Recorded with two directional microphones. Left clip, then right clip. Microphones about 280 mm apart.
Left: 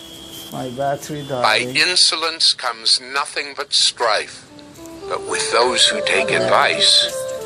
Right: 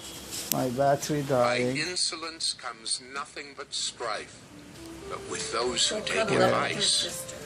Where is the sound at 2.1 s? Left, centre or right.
Left.